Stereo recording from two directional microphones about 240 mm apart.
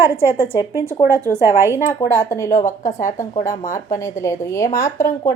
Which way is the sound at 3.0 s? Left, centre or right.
Left.